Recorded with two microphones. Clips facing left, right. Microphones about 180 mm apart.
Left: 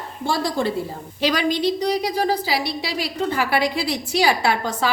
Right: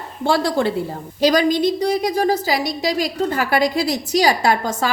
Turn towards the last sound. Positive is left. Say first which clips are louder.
# right 3 dB
turn(degrees=-45)  # may be behind; listen again after turning